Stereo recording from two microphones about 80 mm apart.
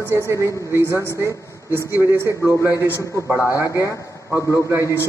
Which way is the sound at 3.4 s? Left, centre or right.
Left.